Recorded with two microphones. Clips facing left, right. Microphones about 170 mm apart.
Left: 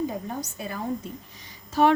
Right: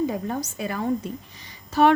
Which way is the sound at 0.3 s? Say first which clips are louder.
Right 5 dB; 80° right.